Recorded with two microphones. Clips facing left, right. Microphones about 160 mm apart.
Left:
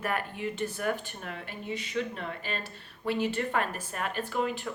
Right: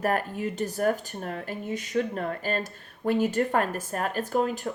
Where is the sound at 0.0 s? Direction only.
40° right (ahead or behind).